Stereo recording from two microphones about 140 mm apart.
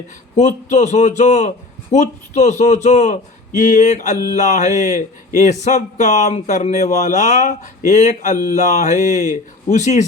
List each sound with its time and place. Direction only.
0.3 s a man's voice: 55° left (ahead or behind)